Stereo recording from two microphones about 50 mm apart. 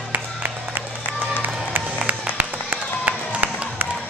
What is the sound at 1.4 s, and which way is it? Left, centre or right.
Music, right.